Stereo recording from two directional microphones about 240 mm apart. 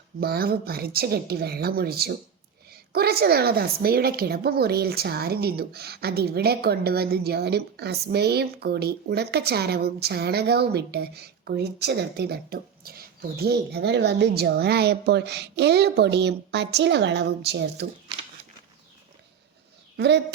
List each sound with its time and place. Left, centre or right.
0.2 s a woman's voice: right
20.0 s a woman's voice: right